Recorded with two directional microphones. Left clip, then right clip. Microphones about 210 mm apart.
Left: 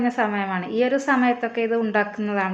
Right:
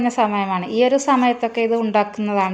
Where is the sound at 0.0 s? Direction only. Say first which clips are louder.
Right 4 dB; 30° right (ahead or behind).